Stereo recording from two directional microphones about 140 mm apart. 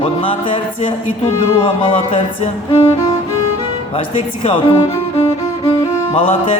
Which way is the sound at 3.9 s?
45° left (ahead or behind).